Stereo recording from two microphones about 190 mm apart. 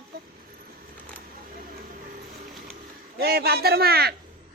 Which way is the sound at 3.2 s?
55° right (ahead or behind).